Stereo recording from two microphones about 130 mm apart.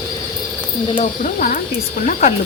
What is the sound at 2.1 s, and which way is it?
Speech, 70° left (ahead or behind).